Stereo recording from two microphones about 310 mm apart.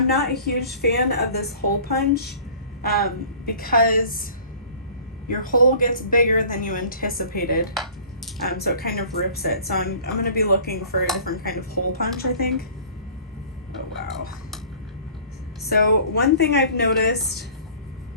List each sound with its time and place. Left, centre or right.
0.1 s a woman's voice: left
5.3 s a woman's voice: left
15.6 s speech: left